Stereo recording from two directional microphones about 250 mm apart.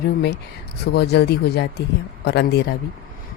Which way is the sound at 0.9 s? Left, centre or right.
Left.